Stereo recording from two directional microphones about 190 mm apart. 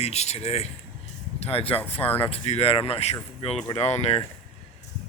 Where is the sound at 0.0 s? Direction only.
35° left (ahead or behind).